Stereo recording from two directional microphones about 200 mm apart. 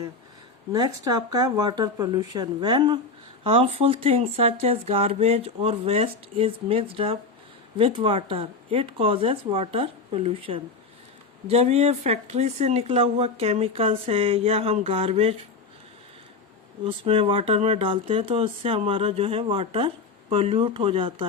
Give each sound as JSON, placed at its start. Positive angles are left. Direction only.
{"t": 0.7, "sound": "speech", "side_deg": -20}
{"t": 16.8, "sound": "speech", "side_deg": -25}